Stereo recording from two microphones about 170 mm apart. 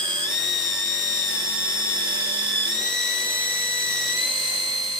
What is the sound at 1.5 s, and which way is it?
Drill, 5° right (ahead or behind).